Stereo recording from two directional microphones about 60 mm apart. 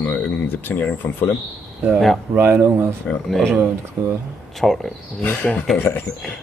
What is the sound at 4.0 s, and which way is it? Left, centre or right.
Speech, right.